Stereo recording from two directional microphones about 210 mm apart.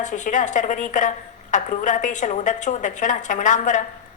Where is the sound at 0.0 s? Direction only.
35° left (ahead or behind).